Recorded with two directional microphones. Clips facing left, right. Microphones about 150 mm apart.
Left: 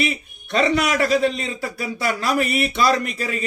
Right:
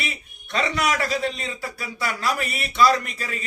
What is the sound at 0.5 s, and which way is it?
A man's voice, 20° left (ahead or behind).